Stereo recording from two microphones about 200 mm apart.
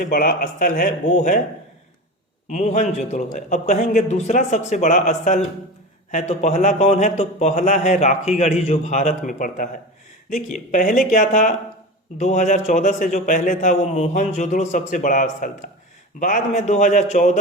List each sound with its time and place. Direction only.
0.0 s speech: 45° left (ahead or behind)
2.5 s a man's voice: 35° left (ahead or behind)